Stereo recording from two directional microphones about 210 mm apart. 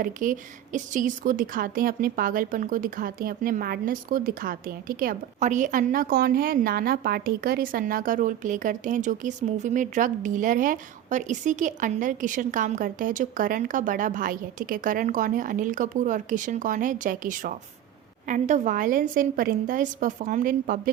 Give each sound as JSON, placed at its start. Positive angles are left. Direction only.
{"t": 0.0, "sound": "speech", "side_deg": -40}